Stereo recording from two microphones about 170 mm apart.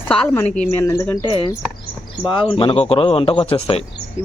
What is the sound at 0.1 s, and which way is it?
A woman's voice, 10° left (ahead or behind).